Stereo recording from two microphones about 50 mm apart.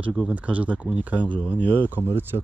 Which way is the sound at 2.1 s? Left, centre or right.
Right.